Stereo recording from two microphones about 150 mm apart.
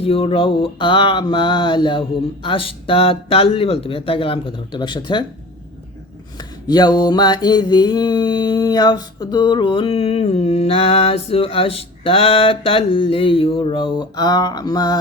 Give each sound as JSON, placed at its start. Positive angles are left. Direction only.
{"t": 0.0, "sound": "mantra", "side_deg": 40}
{"t": 6.7, "sound": "mantra", "side_deg": 25}